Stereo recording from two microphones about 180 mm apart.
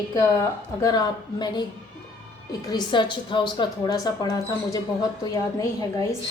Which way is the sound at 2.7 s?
25° left (ahead or behind).